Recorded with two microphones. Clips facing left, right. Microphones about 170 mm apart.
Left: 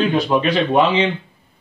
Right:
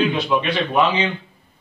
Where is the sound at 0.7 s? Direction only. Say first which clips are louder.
Left 2 dB; 30° left (ahead or behind).